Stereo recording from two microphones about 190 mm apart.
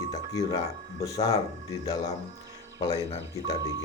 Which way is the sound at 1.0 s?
20° left (ahead or behind).